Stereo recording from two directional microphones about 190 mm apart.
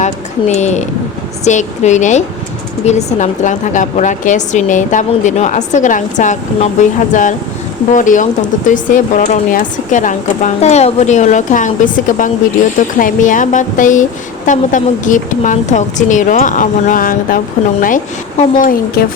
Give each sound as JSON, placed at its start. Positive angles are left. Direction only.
{"t": 0.0, "sound": "a woman's voice", "side_deg": 35}